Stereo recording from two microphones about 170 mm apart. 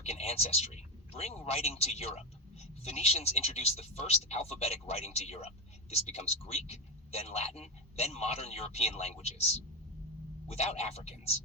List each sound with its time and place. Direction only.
0.0 s a man's voice: 35° left (ahead or behind)
10.5 s a man's voice: 40° left (ahead or behind)